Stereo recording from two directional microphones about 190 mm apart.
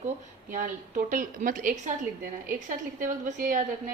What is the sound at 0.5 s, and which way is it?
A woman's voice, 45° right (ahead or behind).